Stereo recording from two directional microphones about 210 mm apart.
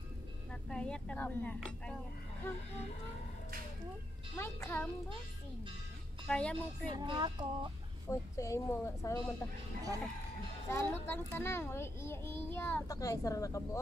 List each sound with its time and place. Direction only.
0.5 s speech: 5° left (ahead or behind)
4.4 s a child's voice: 10° left (ahead or behind)
6.2 s speech: 5° left (ahead or behind)
6.9 s speech: 20° right (ahead or behind)
8.1 s a child's voice: 15° left (ahead or behind)
10.7 s a child's voice: 10° left (ahead or behind)